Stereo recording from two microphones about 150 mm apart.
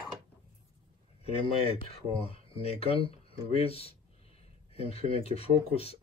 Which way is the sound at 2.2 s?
40° left (ahead or behind).